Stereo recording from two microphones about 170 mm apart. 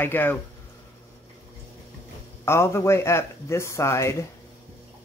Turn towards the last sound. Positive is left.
turn(degrees=15)  # may be behind; listen again after turning